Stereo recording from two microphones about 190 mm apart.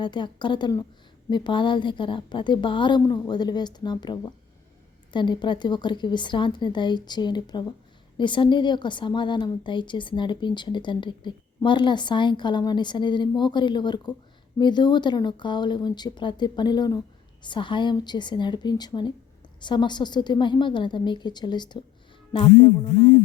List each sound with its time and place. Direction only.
0.0 s a woman's voice: 25° left (ahead or behind)